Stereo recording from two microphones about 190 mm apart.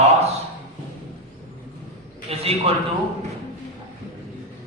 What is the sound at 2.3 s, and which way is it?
Speech, 30° right (ahead or behind).